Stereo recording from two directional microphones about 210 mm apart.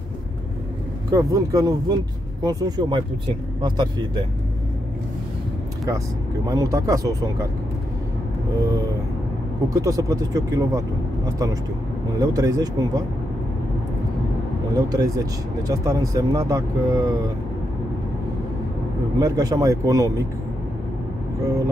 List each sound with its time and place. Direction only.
1.1 s speech: 15° right (ahead or behind)
6.4 s speech: 15° right (ahead or behind)
8.6 s speech: 15° right (ahead or behind)
14.8 s speech: 15° right (ahead or behind)
19.1 s speech: 15° right (ahead or behind)